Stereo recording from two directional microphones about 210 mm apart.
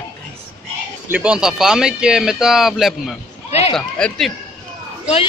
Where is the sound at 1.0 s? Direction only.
5° right (ahead or behind).